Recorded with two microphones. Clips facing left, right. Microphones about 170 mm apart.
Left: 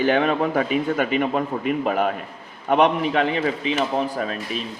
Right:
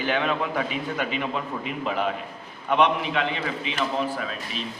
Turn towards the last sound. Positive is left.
turn(degrees=45)  # may be behind; listen again after turning